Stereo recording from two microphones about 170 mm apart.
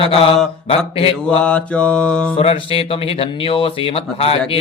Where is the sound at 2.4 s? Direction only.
35° left (ahead or behind).